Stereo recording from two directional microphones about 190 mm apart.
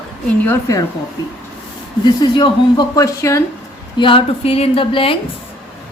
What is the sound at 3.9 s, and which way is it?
Speech, 25° left (ahead or behind).